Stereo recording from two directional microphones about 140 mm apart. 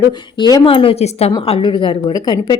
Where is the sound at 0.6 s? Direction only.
40° left (ahead or behind).